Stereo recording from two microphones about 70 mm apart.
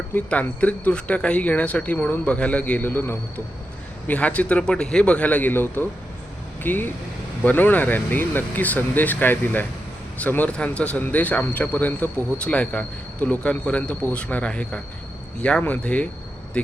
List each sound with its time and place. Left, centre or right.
0.1 s speech: left
4.1 s speech: centre